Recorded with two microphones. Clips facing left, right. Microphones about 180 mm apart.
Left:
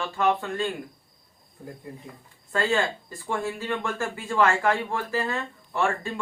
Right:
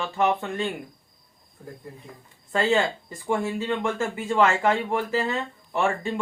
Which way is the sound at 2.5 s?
20° right (ahead or behind).